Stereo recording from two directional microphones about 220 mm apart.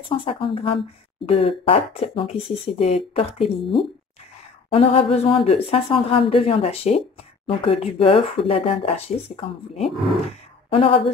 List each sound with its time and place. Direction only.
0.2 s speech: 25° left (ahead or behind)